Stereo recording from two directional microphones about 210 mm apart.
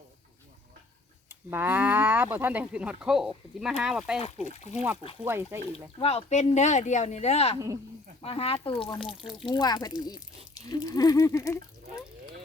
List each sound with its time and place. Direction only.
1.3 s speech: 10° right (ahead or behind)
5.7 s speech: 30° left (ahead or behind); by 11.6 s 15° left (ahead or behind)